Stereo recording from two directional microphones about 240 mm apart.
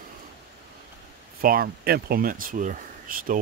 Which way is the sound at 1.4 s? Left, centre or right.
Right.